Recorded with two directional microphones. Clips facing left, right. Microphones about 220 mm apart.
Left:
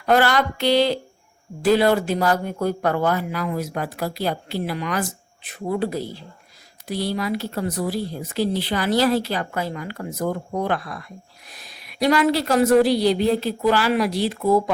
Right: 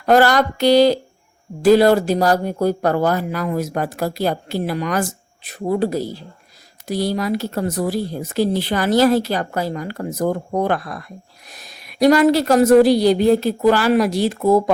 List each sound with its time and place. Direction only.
0.0 s speech: 40° right (ahead or behind)